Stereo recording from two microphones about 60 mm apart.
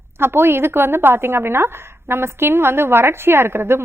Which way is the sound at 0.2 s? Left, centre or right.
Right.